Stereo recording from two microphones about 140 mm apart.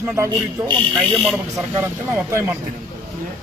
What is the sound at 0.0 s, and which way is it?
A man's voice, 20° right (ahead or behind).